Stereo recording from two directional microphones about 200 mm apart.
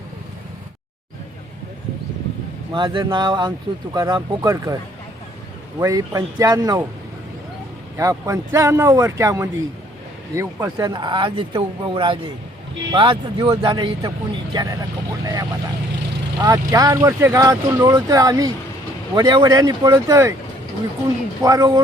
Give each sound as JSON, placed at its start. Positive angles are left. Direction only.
{"t": 2.7, "sound": "speech", "side_deg": -25}
{"t": 5.8, "sound": "speech", "side_deg": -15}
{"t": 7.9, "sound": "speech", "side_deg": -15}
{"t": 21.4, "sound": "speech", "side_deg": -20}